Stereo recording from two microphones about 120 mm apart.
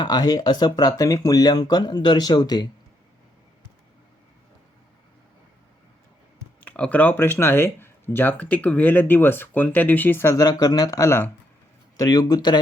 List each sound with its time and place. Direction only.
0.0 s speech: 35° left (ahead or behind)
6.7 s speech: 10° left (ahead or behind)
10.4 s speech: 30° left (ahead or behind)